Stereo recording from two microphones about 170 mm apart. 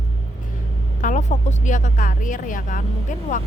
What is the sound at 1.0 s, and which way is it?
A woman's voice, 45° left (ahead or behind).